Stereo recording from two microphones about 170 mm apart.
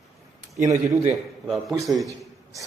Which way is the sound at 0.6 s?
20° right (ahead or behind).